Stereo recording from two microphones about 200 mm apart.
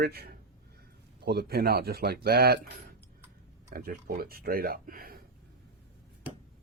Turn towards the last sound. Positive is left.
turn(degrees=-45)  # may be behind; listen again after turning